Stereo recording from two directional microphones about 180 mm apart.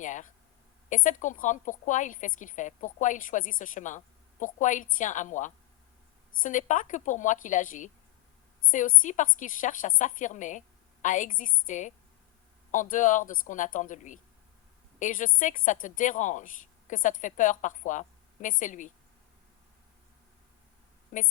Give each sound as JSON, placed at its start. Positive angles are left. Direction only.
{"t": 0.0, "sound": "a woman's voice", "side_deg": 45}